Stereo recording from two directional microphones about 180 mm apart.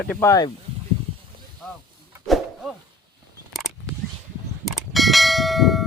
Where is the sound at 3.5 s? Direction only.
Centre (ahead or behind).